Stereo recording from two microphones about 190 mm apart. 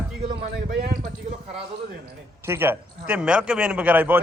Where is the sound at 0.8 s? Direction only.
35° right (ahead or behind).